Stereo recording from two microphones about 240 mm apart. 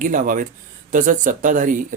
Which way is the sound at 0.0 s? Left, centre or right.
Right.